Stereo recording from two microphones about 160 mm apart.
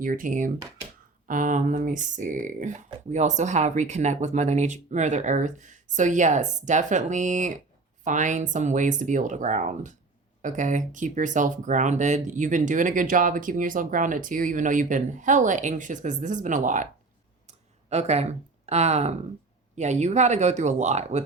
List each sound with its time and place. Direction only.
0.0 s speech: 55° right (ahead or behind)
17.4 s a sound: 45° right (ahead or behind)
19.7 s speech: 45° right (ahead or behind)